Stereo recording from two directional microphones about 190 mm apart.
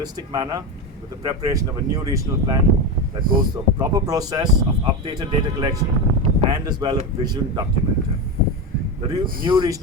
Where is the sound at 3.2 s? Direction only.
50° right (ahead or behind).